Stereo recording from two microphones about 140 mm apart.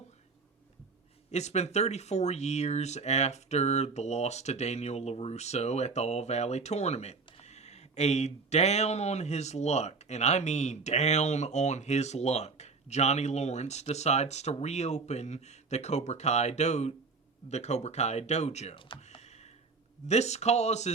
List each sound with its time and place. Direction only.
1.3 s speech: 55° left (ahead or behind)
19.0 s computer keyboard: 50° left (ahead or behind)
20.1 s speech: 50° left (ahead or behind)